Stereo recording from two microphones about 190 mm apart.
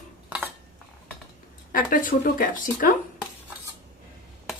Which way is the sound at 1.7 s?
45° left (ahead or behind).